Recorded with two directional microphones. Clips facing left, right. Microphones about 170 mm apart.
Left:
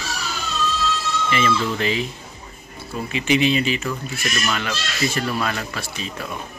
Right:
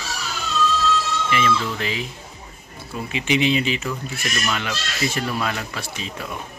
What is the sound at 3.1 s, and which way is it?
Speech, 20° right (ahead or behind).